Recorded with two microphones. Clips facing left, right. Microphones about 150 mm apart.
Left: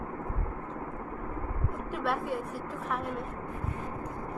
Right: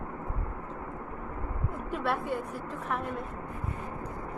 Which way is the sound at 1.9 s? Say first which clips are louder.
Right 1 dB; centre (ahead or behind).